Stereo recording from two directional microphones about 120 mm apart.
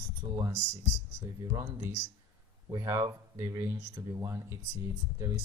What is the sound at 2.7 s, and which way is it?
Speech, 25° right (ahead or behind).